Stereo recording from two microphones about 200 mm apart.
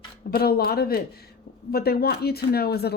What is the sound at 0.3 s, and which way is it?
Speech, 50° left (ahead or behind).